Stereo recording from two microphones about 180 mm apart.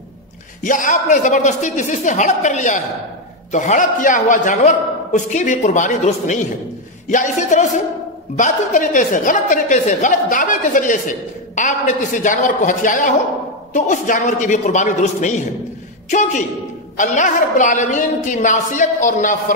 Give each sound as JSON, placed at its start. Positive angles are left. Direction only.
{"t": 0.6, "sound": "a woman's voice", "side_deg": 45}